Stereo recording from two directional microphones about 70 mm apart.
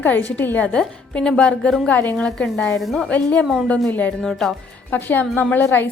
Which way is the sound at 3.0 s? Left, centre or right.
Centre.